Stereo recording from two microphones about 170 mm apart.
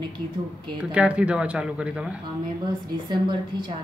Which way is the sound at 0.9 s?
5° right (ahead or behind).